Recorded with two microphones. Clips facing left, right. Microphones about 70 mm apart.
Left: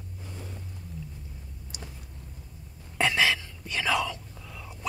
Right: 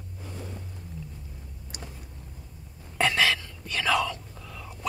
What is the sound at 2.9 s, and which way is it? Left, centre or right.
Whispering, centre.